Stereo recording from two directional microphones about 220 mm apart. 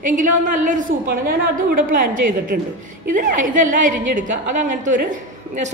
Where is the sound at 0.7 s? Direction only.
35° right (ahead or behind).